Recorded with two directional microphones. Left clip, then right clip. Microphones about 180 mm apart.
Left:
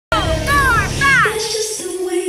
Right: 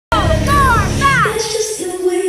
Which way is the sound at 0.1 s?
10° right (ahead or behind).